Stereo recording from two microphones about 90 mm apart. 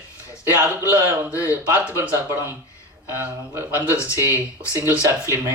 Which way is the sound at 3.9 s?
35° left (ahead or behind).